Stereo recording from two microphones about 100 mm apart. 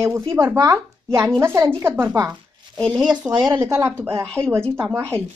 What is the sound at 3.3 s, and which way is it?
Speech, 45° right (ahead or behind).